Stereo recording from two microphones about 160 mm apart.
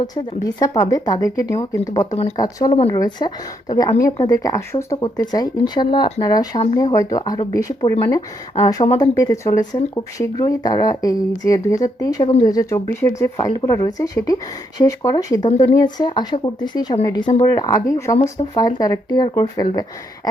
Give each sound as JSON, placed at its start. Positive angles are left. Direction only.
{"t": 0.0, "sound": "speech", "side_deg": 25}